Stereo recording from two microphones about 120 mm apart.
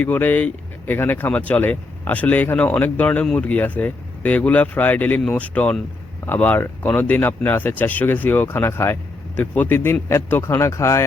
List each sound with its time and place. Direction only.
0.0 s speech: 15° left (ahead or behind)